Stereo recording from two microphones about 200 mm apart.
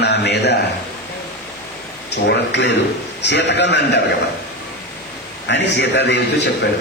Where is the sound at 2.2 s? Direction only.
60° left (ahead or behind).